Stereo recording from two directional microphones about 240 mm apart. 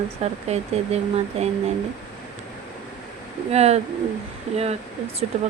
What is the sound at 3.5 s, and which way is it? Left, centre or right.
Speech, right.